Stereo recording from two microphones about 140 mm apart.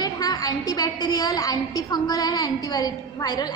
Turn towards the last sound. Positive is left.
turn(degrees=30)  # may be behind; listen again after turning